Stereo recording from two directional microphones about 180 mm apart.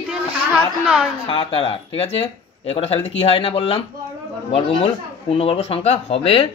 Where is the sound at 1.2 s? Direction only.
30° left (ahead or behind).